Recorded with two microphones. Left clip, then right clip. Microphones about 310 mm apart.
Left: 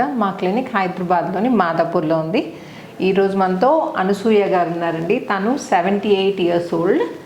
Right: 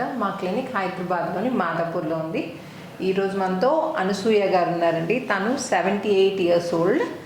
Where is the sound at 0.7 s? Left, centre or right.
Left.